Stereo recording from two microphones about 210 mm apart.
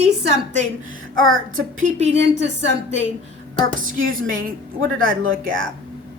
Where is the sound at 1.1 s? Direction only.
70° right (ahead or behind).